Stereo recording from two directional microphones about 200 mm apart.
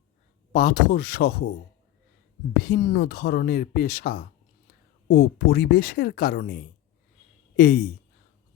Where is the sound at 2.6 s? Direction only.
45° left (ahead or behind).